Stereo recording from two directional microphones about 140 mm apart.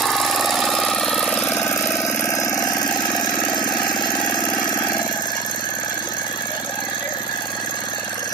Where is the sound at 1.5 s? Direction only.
15° left (ahead or behind).